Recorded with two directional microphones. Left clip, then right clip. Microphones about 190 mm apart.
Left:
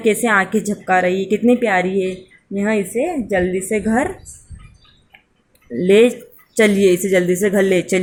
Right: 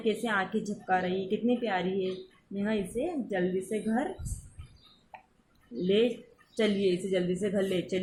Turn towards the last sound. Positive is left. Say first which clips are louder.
# left 15 dB
turn(degrees=45)  # may be behind; listen again after turning